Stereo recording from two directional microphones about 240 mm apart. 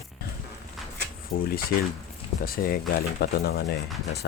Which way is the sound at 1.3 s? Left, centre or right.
Left.